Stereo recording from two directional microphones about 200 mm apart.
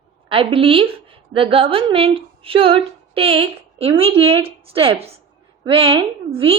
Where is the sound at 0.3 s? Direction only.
25° right (ahead or behind).